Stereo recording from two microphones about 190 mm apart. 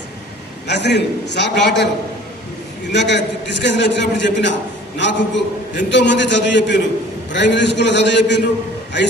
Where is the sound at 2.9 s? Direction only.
65° left (ahead or behind).